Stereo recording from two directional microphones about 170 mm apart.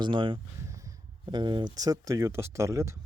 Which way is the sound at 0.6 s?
20° right (ahead or behind).